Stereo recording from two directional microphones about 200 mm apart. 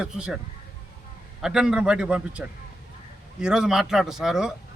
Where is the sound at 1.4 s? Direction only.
5° right (ahead or behind).